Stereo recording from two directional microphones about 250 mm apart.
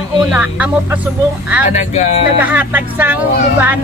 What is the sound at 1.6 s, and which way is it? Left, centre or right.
Speech, left.